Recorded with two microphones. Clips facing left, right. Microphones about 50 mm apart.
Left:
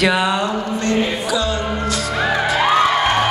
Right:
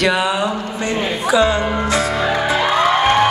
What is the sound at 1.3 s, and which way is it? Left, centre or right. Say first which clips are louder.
Music: right 5 dB; right.